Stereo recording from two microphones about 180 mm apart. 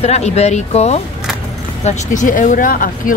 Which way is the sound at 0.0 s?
35° left (ahead or behind).